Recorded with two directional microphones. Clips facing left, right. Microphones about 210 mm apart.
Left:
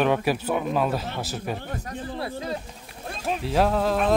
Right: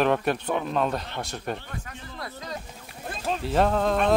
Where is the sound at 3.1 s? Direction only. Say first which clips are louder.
Left 1 dB; centre (ahead or behind).